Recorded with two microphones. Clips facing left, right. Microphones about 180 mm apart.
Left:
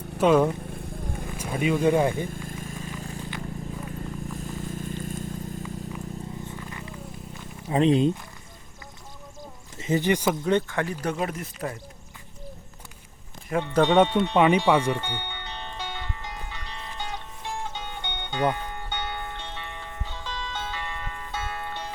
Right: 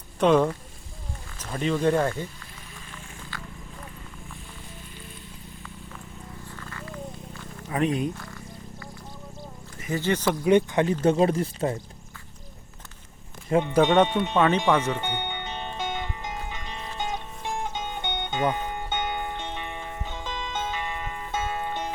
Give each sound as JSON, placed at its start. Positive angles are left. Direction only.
{"t": 0.2, "sound": "speech", "side_deg": 5}
{"t": 1.5, "sound": "speech", "side_deg": 10}
{"t": 2.5, "sound": "a sound", "side_deg": 45}
{"t": 4.3, "sound": "vehicle", "side_deg": 45}
{"t": 6.5, "sound": "a sound", "side_deg": 20}
{"t": 7.7, "sound": "speech", "side_deg": 25}
{"t": 9.7, "sound": "speech", "side_deg": 20}
{"t": 10.4, "sound": "speech", "side_deg": -15}
{"t": 13.5, "sound": "speech", "side_deg": -15}
{"t": 14.3, "sound": "speech", "side_deg": 15}
{"t": 14.9, "sound": "music", "side_deg": -15}